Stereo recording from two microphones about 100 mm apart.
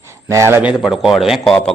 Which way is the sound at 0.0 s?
30° right (ahead or behind).